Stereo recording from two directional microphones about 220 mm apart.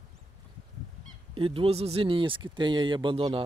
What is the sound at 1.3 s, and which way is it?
Speech, 25° right (ahead or behind).